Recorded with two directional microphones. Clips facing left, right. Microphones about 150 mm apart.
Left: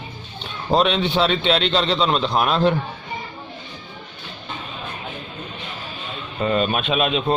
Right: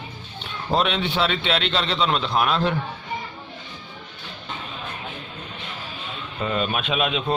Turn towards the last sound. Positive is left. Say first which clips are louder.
# left 3 dB
turn(degrees=35)  # may be behind; listen again after turning